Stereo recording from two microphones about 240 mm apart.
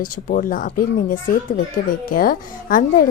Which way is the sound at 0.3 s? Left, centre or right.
Left.